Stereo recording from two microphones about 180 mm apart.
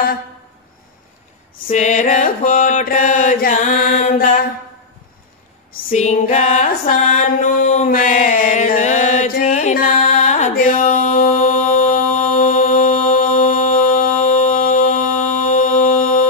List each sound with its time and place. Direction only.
1.7 s mantra: 40° left (ahead or behind)
5.7 s a sound: 45° left (ahead or behind)
9.3 s music: 45° left (ahead or behind)